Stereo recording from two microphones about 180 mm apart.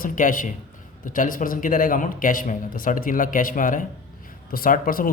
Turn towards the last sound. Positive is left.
turn(degrees=50)  # may be behind; listen again after turning